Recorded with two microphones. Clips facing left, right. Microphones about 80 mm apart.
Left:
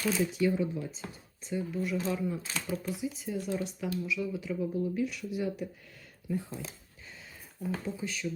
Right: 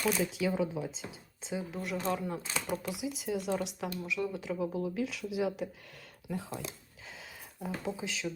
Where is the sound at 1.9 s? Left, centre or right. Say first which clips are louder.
Right 1 dB; right.